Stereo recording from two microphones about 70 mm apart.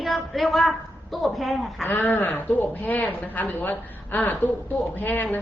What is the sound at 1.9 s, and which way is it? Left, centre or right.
A woman's voice, left.